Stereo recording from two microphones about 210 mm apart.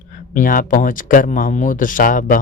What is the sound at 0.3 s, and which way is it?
Speech, 40° left (ahead or behind).